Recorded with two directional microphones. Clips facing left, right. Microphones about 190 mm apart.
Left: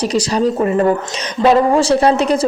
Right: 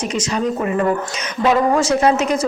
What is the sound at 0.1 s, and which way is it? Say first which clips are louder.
Speech: left 5 dB; 35° left (ahead or behind).